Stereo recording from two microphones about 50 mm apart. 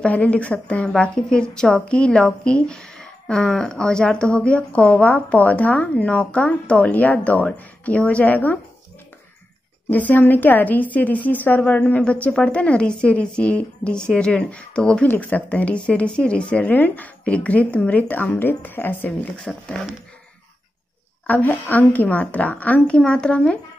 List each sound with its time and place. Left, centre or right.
0.0 s a woman's voice: left
9.8 s a woman's voice: left
15.2 s speech: left
18.6 s a woman's voice: left
19.0 s speech: left
21.3 s a woman's voice: left